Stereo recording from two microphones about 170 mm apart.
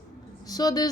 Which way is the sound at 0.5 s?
20° left (ahead or behind).